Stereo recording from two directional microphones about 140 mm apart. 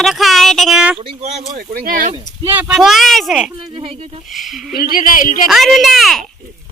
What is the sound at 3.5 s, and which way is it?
Speech, 40° right (ahead or behind).